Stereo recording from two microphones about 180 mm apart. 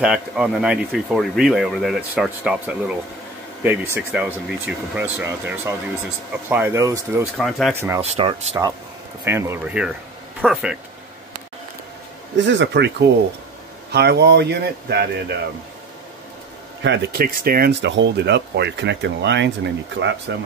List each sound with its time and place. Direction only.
0.0 s speech: 5° right (ahead or behind)
7.3 s speech: centre (ahead or behind)
7.7 s speech: 15° right (ahead or behind)
8.0 s speech: 35° right (ahead or behind)
9.2 s speech: 15° right (ahead or behind)
12.4 s speech: 85° right; by 15.3 s 65° right (ahead or behind)
16.8 s speech: 65° right (ahead or behind)